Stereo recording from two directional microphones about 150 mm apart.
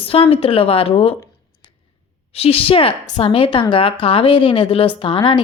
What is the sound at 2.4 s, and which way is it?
A woman's voice, 40° left (ahead or behind).